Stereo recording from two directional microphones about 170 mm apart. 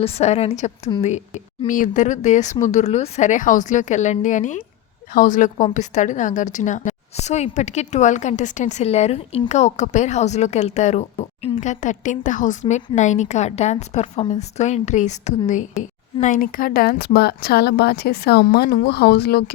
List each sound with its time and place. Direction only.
0.0 s a woman's voice: 40° left (ahead or behind); by 19.5 s 70° left (ahead or behind)